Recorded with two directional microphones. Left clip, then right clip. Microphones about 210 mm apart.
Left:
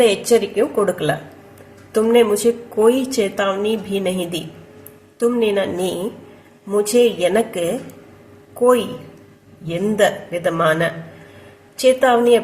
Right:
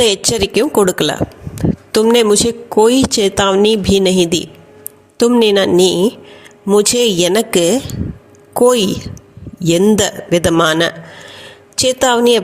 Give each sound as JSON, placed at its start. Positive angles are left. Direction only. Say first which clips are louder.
{"t": 0.0, "sound": "a woman's voice", "louder": "right 1 dB", "side_deg": -50}